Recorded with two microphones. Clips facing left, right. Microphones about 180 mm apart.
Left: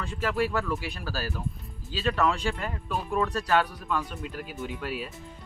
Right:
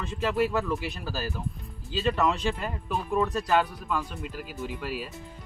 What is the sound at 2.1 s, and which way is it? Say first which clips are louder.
Speech: even; 5° right (ahead or behind).